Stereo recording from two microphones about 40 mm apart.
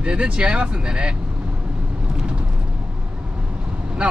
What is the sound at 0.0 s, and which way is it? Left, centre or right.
Speech, right.